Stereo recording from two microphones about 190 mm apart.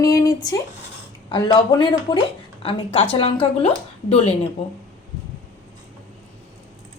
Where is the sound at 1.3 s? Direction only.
25° left (ahead or behind).